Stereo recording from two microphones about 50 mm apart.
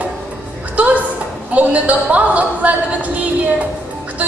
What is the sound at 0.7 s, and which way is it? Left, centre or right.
A woman's voice, right.